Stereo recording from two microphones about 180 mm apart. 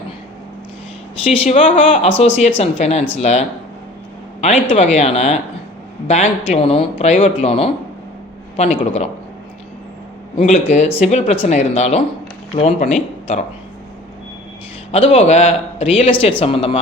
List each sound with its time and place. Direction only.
1.2 s speech: 35° left (ahead or behind)
4.6 s speech: 35° left (ahead or behind)
10.3 s speech: 40° left (ahead or behind)
14.9 s speech: 30° left (ahead or behind)